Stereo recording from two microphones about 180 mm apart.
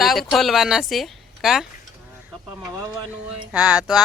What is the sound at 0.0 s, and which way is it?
Speech, centre (ahead or behind).